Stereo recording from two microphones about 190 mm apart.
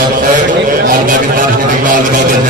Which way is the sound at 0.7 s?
50° right (ahead or behind).